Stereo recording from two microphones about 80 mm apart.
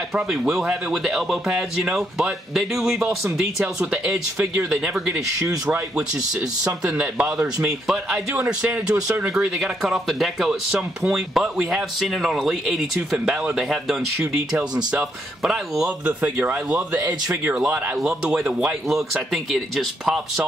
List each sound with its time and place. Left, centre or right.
0.1 s speech: centre
6.6 s speech: centre
16.1 s speech: right
18.0 s speech: centre